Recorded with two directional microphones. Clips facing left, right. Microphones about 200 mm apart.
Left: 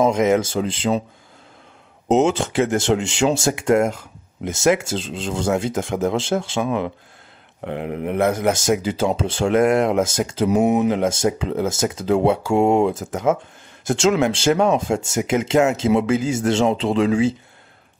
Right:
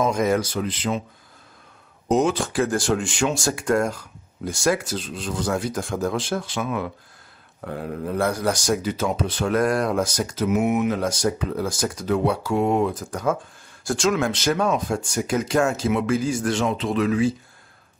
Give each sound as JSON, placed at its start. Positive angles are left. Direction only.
{"t": 0.0, "sound": "speech", "side_deg": 20}
{"t": 2.0, "sound": "speech", "side_deg": 25}